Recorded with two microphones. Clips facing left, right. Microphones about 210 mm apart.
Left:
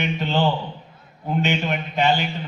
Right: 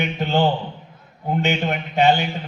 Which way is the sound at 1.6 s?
60° right (ahead or behind).